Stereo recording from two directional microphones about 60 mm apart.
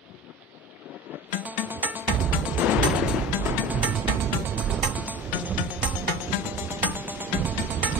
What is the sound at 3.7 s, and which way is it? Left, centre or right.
Music, right.